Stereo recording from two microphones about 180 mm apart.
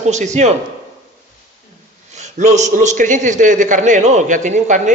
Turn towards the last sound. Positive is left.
turn(degrees=-40)  # may be behind; listen again after turning